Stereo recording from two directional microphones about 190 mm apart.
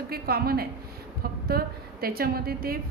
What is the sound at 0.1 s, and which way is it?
A woman's voice, 55° right (ahead or behind).